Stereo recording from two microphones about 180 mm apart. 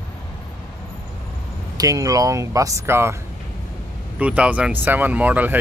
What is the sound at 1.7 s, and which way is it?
Speech, 20° right (ahead or behind).